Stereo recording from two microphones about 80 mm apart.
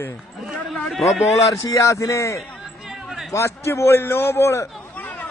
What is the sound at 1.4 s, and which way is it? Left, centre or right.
A man's voice, left.